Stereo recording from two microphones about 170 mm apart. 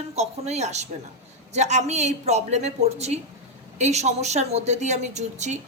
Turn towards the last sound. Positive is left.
turn(degrees=-45)  # may be behind; listen again after turning